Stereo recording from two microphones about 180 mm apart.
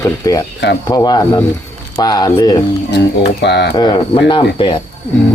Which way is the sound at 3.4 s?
70° left (ahead or behind).